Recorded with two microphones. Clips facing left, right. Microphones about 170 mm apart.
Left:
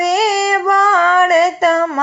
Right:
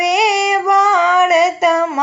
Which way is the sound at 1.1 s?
Centre (ahead or behind).